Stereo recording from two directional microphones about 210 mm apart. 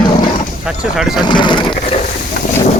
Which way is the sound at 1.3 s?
20° left (ahead or behind).